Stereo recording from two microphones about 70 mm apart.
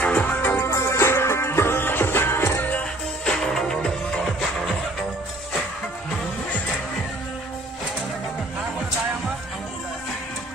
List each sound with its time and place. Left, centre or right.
0.0 s music: left
2.6 s music: left
3.3 s music: centre